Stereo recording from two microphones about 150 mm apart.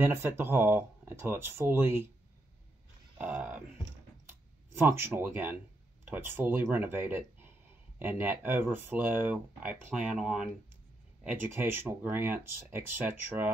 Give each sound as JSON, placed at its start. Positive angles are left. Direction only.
{"t": 0.0, "sound": "speech", "side_deg": -15}
{"t": 3.2, "sound": "speech", "side_deg": -10}